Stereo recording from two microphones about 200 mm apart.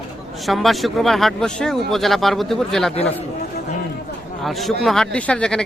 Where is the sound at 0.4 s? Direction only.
Centre (ahead or behind).